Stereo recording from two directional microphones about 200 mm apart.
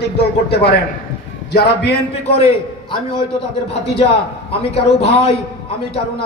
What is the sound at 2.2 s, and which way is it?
Speech, 30° left (ahead or behind).